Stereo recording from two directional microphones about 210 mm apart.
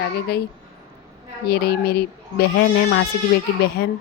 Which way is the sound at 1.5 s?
50° left (ahead or behind).